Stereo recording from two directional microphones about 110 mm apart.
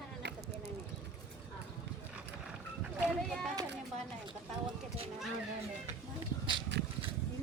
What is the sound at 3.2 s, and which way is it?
Children playing, 5° left (ahead or behind).